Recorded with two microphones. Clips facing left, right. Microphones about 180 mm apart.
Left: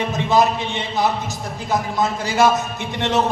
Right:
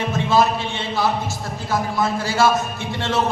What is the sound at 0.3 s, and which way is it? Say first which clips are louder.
A man's voice: left 1 dB; 20° left (ahead or behind).